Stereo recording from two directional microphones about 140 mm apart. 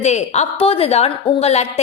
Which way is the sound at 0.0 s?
55° left (ahead or behind).